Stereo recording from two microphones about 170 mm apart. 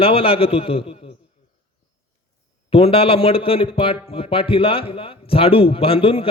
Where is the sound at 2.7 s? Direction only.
35° left (ahead or behind).